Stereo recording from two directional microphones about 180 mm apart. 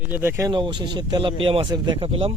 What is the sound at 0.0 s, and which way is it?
Speech, 10° right (ahead or behind).